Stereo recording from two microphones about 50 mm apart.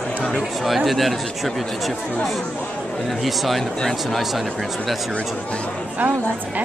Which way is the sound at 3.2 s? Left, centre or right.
Centre.